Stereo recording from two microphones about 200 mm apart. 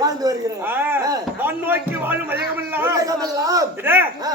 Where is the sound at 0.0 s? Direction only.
20° right (ahead or behind).